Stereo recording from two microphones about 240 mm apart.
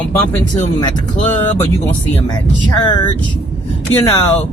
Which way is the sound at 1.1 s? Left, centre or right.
Left.